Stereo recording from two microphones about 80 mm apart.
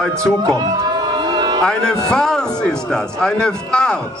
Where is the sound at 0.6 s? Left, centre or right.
Right.